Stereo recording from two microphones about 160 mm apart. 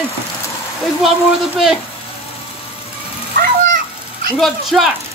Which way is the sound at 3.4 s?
65° right (ahead or behind).